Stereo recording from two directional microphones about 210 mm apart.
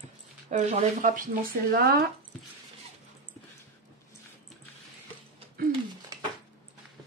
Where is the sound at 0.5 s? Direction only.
35° right (ahead or behind).